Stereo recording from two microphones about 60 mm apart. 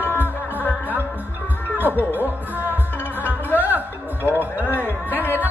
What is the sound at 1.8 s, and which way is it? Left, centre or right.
Speech, right.